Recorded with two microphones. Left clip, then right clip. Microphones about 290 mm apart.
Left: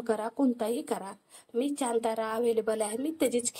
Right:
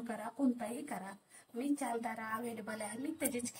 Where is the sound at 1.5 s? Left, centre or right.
Left.